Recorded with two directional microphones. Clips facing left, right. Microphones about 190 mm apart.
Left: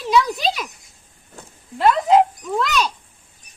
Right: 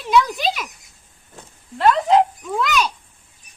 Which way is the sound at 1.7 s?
10° left (ahead or behind).